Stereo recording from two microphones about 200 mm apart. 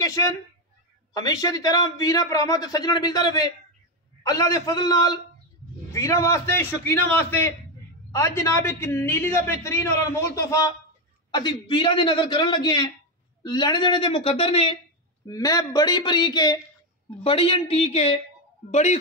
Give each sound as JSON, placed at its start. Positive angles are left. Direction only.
{"t": 1.1, "sound": "a man's voice", "side_deg": 20}
{"t": 15.2, "sound": "a man's voice", "side_deg": 20}